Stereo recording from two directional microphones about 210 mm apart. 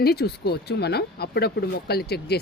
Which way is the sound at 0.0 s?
50° left (ahead or behind).